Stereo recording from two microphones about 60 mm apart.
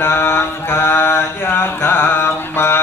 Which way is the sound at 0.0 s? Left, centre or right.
Left.